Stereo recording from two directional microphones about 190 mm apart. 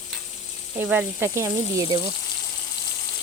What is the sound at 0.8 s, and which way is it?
Speech, 10° right (ahead or behind).